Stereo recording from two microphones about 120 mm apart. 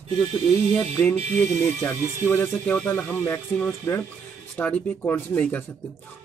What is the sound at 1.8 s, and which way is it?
Speech, 20° left (ahead or behind).